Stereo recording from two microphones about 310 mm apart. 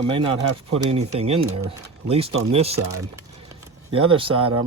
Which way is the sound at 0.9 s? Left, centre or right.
Centre.